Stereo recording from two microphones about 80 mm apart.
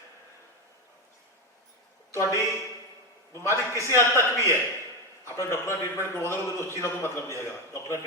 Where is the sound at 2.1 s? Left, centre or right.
Left.